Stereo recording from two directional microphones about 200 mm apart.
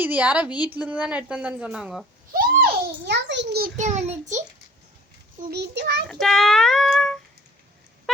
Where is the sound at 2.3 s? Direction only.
50° right (ahead or behind).